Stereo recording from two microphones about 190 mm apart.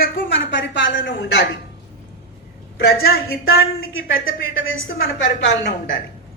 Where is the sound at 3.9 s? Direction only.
90° left.